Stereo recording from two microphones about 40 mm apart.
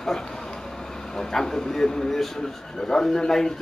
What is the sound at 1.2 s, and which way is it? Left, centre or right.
Speech, centre.